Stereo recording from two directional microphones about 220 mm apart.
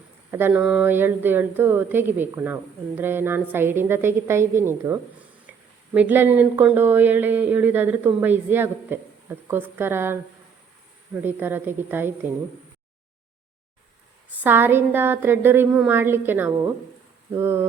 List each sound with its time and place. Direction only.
0.3 s speech: 10° right (ahead or behind)
5.5 s a sound: 5° right (ahead or behind)
5.9 s speech: 10° right (ahead or behind)
11.2 s speech: 10° right (ahead or behind)
14.4 s speech: 10° right (ahead or behind)